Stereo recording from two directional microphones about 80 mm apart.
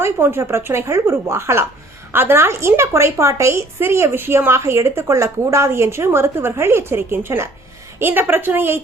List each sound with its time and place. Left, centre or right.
0.0 s a woman's voice: right